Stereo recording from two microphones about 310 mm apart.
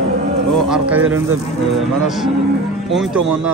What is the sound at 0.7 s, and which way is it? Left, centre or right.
Speech, centre.